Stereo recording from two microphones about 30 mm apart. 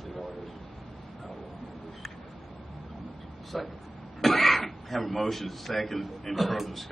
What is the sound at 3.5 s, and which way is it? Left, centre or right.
Speech, centre.